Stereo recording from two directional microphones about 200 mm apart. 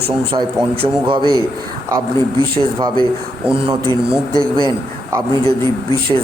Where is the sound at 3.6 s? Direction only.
25° right (ahead or behind).